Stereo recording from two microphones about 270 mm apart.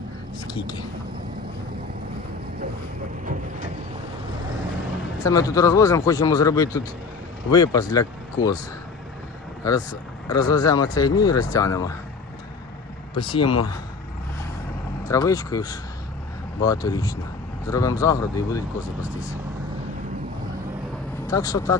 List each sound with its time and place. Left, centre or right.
0.3 s speech: centre
5.2 s speech: centre
9.6 s speech: centre
13.3 s speech: centre
15.0 s speech: centre
21.2 s speech: centre